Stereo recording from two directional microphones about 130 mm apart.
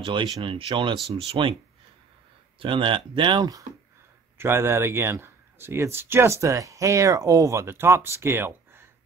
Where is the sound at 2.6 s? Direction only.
40° right (ahead or behind).